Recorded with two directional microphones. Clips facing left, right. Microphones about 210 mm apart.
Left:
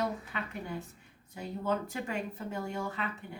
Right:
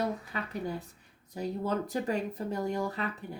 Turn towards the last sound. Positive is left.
turn(degrees=-40)  # may be behind; listen again after turning